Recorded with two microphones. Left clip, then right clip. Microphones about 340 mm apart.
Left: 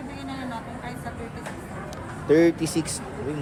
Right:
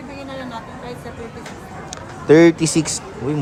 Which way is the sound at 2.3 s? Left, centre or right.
Right.